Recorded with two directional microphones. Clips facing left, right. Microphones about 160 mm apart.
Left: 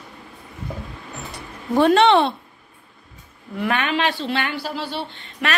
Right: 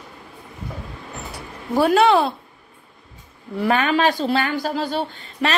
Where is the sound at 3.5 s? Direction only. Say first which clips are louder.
Right 3 dB; 35° right (ahead or behind).